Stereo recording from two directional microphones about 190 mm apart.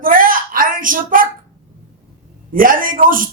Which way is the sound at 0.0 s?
45° right (ahead or behind).